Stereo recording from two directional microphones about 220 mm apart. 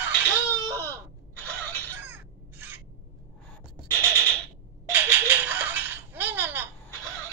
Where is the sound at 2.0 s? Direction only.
10° right (ahead or behind).